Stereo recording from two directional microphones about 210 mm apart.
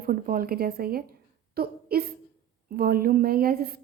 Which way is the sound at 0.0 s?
45° right (ahead or behind).